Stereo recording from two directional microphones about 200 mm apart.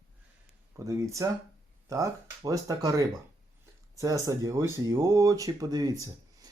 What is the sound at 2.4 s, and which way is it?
Speech, 15° right (ahead or behind).